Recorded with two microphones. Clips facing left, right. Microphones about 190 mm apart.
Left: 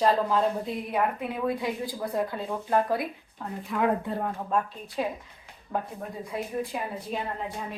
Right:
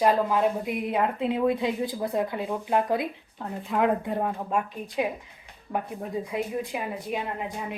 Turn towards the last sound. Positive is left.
turn(degrees=-15)  # may be behind; listen again after turning